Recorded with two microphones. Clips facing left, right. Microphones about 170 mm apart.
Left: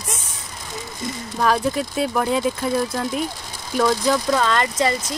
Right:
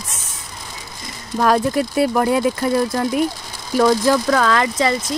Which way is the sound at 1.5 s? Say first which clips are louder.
Right 5 dB; 5° right (ahead or behind).